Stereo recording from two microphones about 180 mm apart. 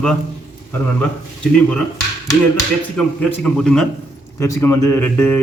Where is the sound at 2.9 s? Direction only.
5° left (ahead or behind).